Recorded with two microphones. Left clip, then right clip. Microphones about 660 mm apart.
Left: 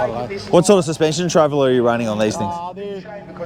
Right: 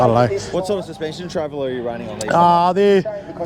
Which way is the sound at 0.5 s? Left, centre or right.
Left.